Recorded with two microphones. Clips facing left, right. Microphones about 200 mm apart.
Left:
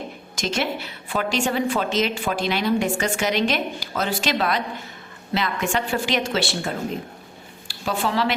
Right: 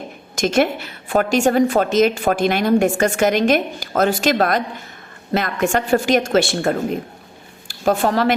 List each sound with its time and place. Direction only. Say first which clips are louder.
0.3 s a woman's voice: right 8 dB; 50° right (ahead or behind)